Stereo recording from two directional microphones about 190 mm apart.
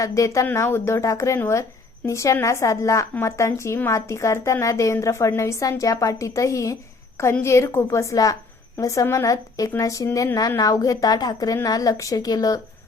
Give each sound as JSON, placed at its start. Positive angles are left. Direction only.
{"t": 0.0, "sound": "speech", "side_deg": 15}